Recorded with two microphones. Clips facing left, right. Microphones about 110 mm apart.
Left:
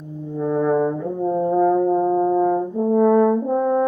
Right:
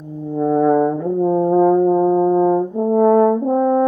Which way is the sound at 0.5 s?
45° right (ahead or behind).